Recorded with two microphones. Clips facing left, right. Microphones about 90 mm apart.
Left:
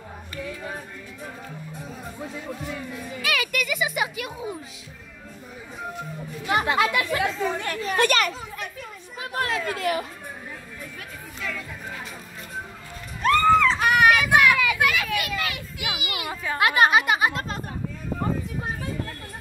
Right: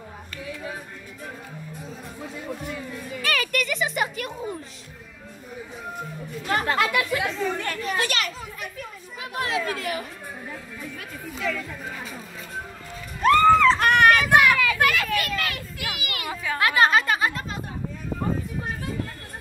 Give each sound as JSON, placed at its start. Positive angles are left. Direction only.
{"t": 2.4, "sound": "a child's voice", "side_deg": 0}
{"t": 6.4, "sound": "speech", "side_deg": 15}
{"t": 6.9, "sound": "speech", "side_deg": 30}
{"t": 7.2, "sound": "speech", "side_deg": 5}
{"t": 7.5, "sound": "speech", "side_deg": 15}
{"t": 9.3, "sound": "a child's voice", "side_deg": 40}
{"t": 9.6, "sound": "speech", "side_deg": 0}
{"t": 11.3, "sound": "chatter", "side_deg": 0}
{"t": 13.2, "sound": "a sound", "side_deg": 0}
{"t": 14.8, "sound": "a child's voice", "side_deg": 5}
{"t": 16.4, "sound": "speech", "side_deg": 20}